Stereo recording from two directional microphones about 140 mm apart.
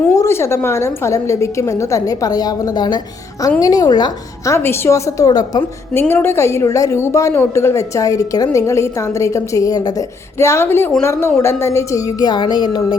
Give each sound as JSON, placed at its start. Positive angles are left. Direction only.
{"t": 0.1, "sound": "a woman's voice", "side_deg": 20}
{"t": 4.5, "sound": "a woman's voice", "side_deg": 15}
{"t": 5.9, "sound": "a woman's voice", "side_deg": 15}